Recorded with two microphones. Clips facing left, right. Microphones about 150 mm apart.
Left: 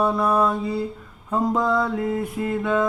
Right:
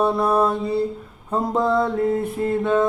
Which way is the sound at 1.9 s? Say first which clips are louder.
Right 4 dB; 40° right (ahead or behind).